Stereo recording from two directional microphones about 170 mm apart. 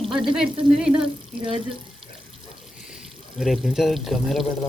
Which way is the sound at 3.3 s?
Centre (ahead or behind).